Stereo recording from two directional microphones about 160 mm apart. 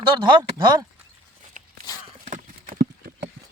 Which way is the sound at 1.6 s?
50° right (ahead or behind).